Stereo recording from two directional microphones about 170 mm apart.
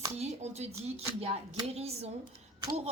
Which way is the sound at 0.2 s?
40° right (ahead or behind).